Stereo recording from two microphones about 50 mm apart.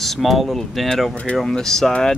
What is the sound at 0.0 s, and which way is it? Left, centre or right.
Speech, centre.